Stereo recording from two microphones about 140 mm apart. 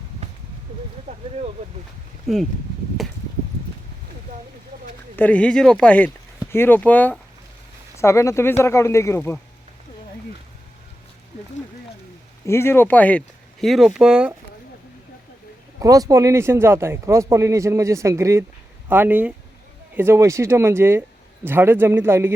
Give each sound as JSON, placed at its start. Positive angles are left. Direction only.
{"t": 2.2, "sound": "speech", "side_deg": 0}
{"t": 5.1, "sound": "speech", "side_deg": 10}
{"t": 12.5, "sound": "speech", "side_deg": 15}
{"t": 15.8, "sound": "speech", "side_deg": -25}